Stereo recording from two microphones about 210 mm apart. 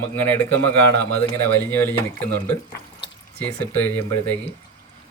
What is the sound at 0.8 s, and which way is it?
Speech, 50° right (ahead or behind).